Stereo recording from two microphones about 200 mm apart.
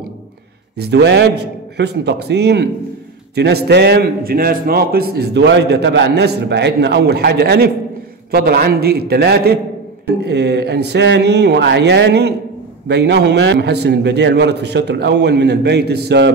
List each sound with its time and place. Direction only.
0.7 s a man's voice: 55° right (ahead or behind)